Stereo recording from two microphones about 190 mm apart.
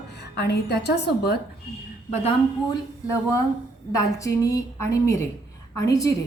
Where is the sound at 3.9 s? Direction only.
15° left (ahead or behind).